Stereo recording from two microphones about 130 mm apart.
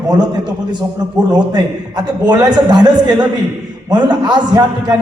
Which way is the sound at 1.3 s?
30° right (ahead or behind).